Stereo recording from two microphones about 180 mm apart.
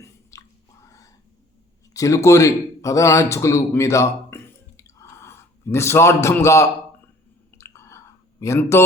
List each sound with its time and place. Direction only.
0.0 s whispering: 15° left (ahead or behind)
1.9 s a man's voice: 15° left (ahead or behind)
7.6 s chewing: 15° left (ahead or behind)